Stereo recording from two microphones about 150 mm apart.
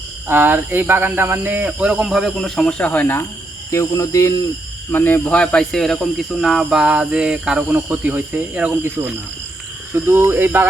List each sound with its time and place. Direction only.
0.3 s speech: 15° right (ahead or behind)